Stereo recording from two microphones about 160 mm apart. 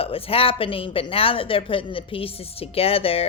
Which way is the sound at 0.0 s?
35° left (ahead or behind).